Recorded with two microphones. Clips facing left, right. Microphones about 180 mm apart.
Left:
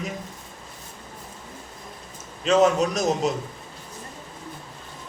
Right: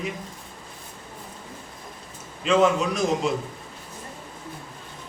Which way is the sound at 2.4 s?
40° left (ahead or behind).